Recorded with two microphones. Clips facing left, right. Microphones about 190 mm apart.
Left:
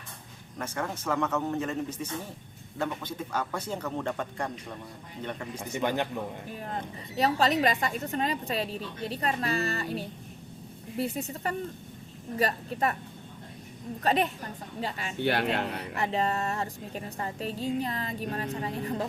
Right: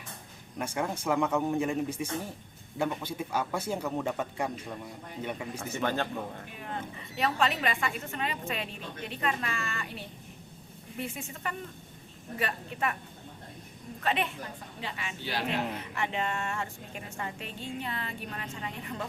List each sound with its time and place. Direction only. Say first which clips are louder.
0.6 s a man's voice: right 1 dB; 10° right (ahead or behind)
5.5 s a man's voice: left 3 dB; 15° left (ahead or behind)
6.6 s a woman's voice: left 1 dB; 35° left (ahead or behind)
14.0 s a woman's voice: left 4 dB; 40° left (ahead or behind)
15.2 s speech: left 8 dB; 60° left (ahead or behind)
15.8 s a woman's voice: left 4 dB; 35° left (ahead or behind)